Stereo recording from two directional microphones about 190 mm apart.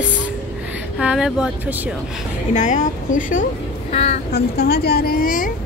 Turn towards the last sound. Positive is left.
turn(degrees=45)  # may be behind; listen again after turning